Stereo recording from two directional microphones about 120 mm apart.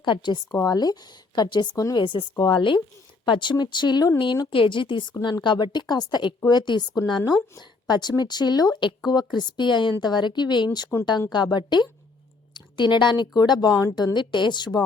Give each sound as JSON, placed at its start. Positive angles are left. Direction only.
{"t": 0.0, "sound": "a woman's voice", "side_deg": 40}